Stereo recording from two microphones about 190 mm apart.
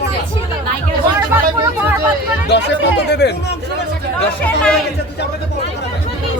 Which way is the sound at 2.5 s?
65° left (ahead or behind).